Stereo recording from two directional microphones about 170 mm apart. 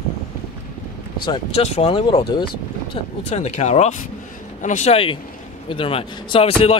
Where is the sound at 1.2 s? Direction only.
25° left (ahead or behind).